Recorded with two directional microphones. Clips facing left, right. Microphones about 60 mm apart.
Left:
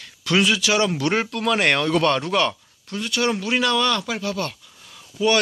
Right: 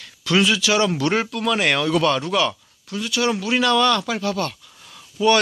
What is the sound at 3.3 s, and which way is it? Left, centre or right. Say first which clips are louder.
A man's voice: right 2 dB; centre.